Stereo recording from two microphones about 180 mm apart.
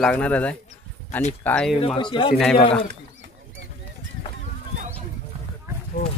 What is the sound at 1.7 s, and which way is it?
Speech, 30° left (ahead or behind).